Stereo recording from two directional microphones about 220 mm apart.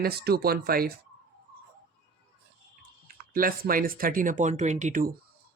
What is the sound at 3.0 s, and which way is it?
Speech, 40° right (ahead or behind).